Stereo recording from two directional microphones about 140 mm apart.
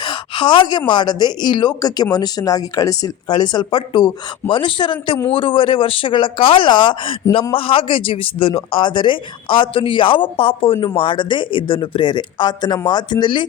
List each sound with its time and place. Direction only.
0.0 s a man's voice: 35° left (ahead or behind)